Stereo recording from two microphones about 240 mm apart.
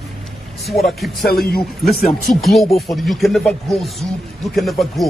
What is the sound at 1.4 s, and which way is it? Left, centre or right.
Speech, left.